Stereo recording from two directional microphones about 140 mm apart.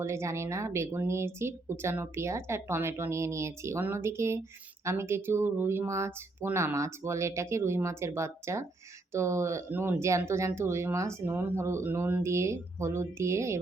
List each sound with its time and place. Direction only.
0.0 s speech: 20° right (ahead or behind)